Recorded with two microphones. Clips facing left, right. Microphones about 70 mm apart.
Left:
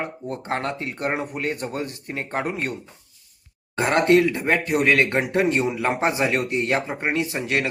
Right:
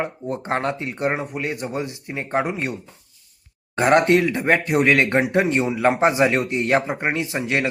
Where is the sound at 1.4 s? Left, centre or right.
Centre.